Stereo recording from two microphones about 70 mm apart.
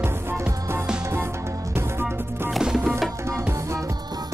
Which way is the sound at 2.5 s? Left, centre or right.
Centre.